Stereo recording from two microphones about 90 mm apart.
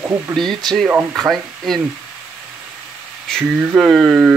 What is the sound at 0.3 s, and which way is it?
Speech, 5° left (ahead or behind).